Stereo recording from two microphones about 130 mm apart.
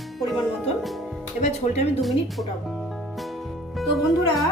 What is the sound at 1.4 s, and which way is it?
Speech, 60° left (ahead or behind).